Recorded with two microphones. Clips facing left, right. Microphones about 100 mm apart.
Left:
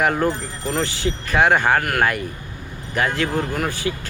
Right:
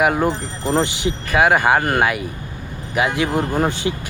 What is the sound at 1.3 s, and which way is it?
Speech, 5° right (ahead or behind).